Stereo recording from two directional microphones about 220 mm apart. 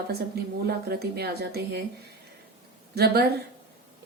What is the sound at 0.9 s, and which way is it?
Speech, 45° right (ahead or behind).